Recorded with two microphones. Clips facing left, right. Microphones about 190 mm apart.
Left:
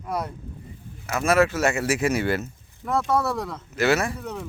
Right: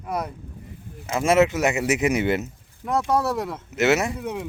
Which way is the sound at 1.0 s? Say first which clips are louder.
Right 2 dB; 25° right (ahead or behind).